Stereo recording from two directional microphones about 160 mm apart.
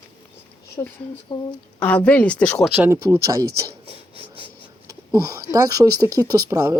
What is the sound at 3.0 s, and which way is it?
Speech, 20° right (ahead or behind).